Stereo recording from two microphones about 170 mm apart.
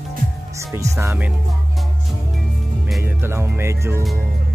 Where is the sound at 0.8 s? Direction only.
15° right (ahead or behind).